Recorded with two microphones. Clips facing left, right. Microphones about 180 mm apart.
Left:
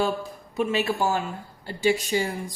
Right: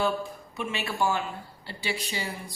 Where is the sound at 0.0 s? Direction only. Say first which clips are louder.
Left 2 dB; 40° left (ahead or behind).